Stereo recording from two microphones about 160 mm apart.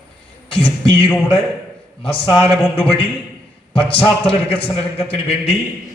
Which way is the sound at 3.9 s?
35° left (ahead or behind).